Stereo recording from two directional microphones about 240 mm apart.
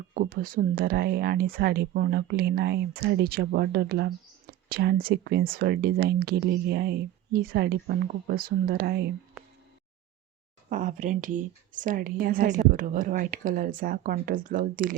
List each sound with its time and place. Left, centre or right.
0.1 s speech: right
10.7 s speech: right